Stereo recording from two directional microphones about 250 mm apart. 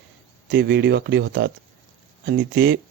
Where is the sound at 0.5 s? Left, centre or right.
Right.